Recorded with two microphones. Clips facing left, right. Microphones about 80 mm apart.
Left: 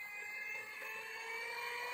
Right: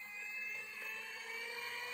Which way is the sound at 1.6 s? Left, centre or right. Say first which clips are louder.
Left 3 dB; left.